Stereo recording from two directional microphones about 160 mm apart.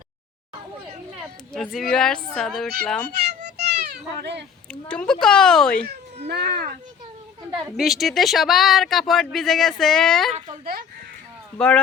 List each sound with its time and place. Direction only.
1.2 s speech: centre (ahead or behind)
3.6 s a sound: 90° right
4.7 s a woman's voice: 5° left (ahead or behind)
6.2 s speech: 90° right
7.8 s speech: centre (ahead or behind)
11.5 s speech: 5° left (ahead or behind)